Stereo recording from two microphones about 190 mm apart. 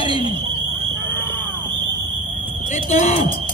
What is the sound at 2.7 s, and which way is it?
Fire alarm, 35° left (ahead or behind).